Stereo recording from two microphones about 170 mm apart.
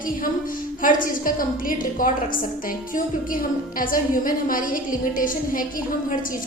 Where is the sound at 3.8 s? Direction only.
55° left (ahead or behind).